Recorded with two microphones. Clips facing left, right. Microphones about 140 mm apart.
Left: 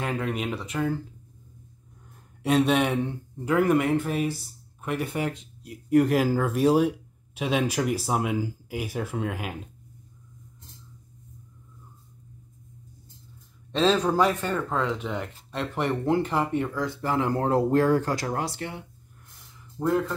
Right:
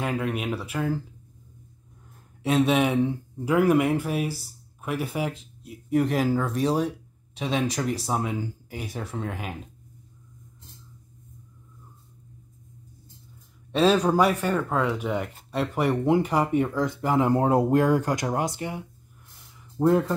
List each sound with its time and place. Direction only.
0.0 s speech: 5° right (ahead or behind)
2.1 s speech: centre (ahead or behind)
13.7 s speech: 10° right (ahead or behind)
19.8 s speech: 25° right (ahead or behind)